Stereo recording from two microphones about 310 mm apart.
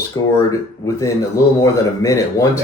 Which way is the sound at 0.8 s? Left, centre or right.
Centre.